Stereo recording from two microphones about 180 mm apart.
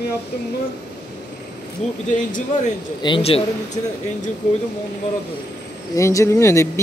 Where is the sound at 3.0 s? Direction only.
30° left (ahead or behind).